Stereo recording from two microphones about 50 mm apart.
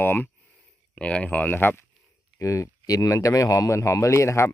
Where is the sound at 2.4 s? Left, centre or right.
Left.